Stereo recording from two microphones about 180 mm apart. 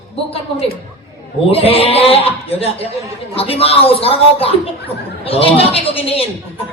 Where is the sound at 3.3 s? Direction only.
30° left (ahead or behind).